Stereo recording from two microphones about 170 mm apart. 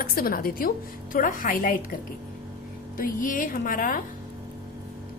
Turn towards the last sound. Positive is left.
turn(degrees=55)  # may be behind; listen again after turning